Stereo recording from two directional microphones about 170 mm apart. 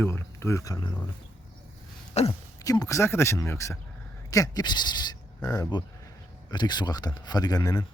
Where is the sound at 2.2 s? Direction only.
40° left (ahead or behind).